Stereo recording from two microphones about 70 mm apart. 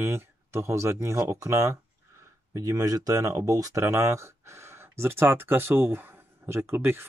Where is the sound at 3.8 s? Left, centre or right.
Right.